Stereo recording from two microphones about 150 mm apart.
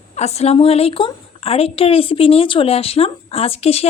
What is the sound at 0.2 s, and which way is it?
A woman's voice, 45° left (ahead or behind).